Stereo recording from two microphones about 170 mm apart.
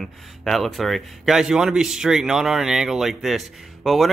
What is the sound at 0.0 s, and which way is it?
A man's voice, centre (ahead or behind).